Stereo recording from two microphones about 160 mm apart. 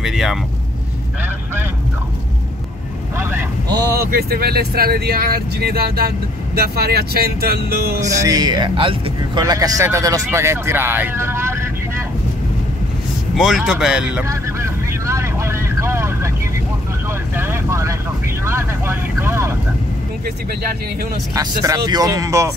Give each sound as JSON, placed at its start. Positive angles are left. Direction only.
{"t": 0.0, "sound": "speech", "side_deg": 0}
{"t": 3.2, "sound": "speech", "side_deg": -15}
{"t": 4.1, "sound": "speech", "side_deg": -70}
{"t": 8.2, "sound": "a man's voice", "side_deg": -25}
{"t": 9.4, "sound": "speech", "side_deg": -20}
{"t": 13.4, "sound": "speech", "side_deg": 0}
{"t": 14.2, "sound": "vehicle", "side_deg": -20}
{"t": 17.4, "sound": "vehicle", "side_deg": -15}
{"t": 21.4, "sound": "a man's voice", "side_deg": -25}